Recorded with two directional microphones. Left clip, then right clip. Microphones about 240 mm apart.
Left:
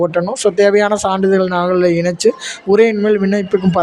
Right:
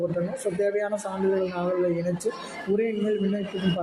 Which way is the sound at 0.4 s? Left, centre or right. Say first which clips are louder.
Left 16 dB; left.